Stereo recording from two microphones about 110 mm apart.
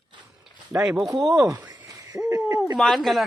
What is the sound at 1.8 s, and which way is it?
Hoot, 30° right (ahead or behind).